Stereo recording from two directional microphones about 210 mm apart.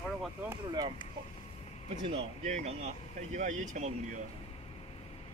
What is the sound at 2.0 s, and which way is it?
Speech, 30° right (ahead or behind).